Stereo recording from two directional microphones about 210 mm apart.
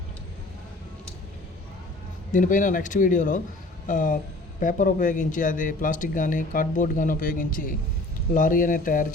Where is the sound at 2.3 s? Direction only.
40° left (ahead or behind).